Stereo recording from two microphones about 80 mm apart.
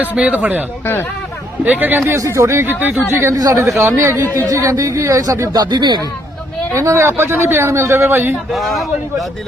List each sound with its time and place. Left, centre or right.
0.0 s speech: centre
1.6 s speech: centre
2.1 s speech: right
5.7 s speech: right
6.7 s speech: right
8.5 s a man's voice: centre